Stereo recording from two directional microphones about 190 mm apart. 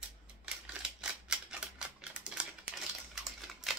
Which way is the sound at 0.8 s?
5° right (ahead or behind).